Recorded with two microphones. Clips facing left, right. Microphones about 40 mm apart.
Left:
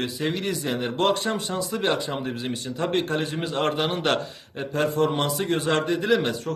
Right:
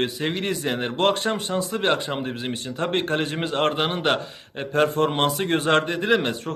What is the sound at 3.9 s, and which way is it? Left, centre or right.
Speech, centre.